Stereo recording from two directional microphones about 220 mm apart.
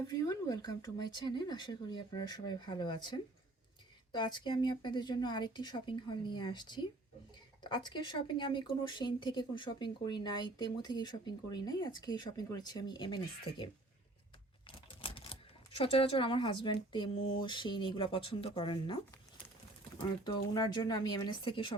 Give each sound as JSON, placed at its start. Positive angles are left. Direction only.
{"t": 0.1, "sound": "speech", "side_deg": 15}
{"t": 14.7, "sound": "speech", "side_deg": 25}
{"t": 20.0, "sound": "speech", "side_deg": 20}